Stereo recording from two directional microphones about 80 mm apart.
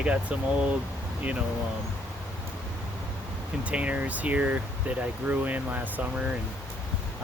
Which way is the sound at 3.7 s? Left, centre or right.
Centre.